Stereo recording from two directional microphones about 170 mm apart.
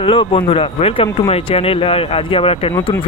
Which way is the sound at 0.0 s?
30° left (ahead or behind).